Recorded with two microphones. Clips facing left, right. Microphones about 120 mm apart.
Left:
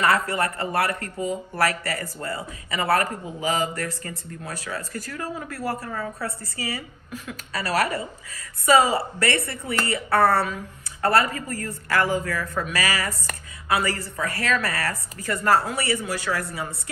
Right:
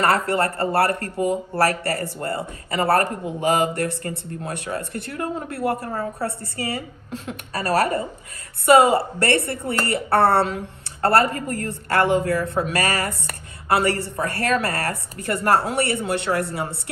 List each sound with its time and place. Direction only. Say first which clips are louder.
0.0 s speech: right 2 dB; 60° right (ahead or behind)
0.7 s a man's voice: right 5 dB; 30° right (ahead or behind)
1.1 s speech: right 5 dB; 60° right (ahead or behind)
1.5 s a woman's voice: right 4 dB; 30° right (ahead or behind)
5.2 s speech: right 6 dB; 55° right (ahead or behind)
5.8 s a woman's voice: right 4 dB; 30° right (ahead or behind)
9.5 s a woman's voice: right 3 dB; 30° right (ahead or behind)
15.3 s speech: right 2 dB; 65° right (ahead or behind)